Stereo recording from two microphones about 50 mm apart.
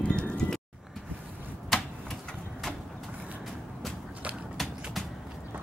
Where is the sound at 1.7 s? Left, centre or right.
Centre.